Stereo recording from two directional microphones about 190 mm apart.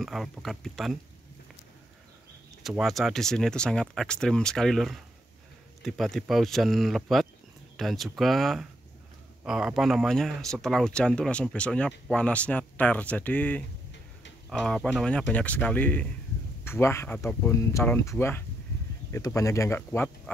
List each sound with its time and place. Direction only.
0.0 s speech: centre (ahead or behind)
2.6 s speech: centre (ahead or behind)